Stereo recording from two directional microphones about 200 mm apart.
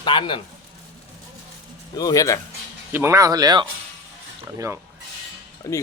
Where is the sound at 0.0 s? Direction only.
25° left (ahead or behind).